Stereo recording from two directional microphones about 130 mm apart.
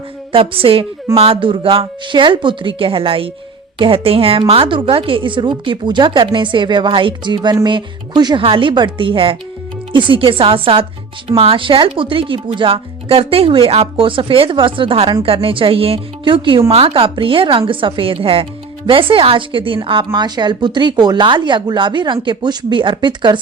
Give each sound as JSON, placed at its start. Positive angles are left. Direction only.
{"t": 0.3, "sound": "a woman's voice", "side_deg": -45}